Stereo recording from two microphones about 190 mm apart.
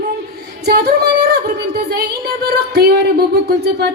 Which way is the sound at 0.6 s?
60° right (ahead or behind).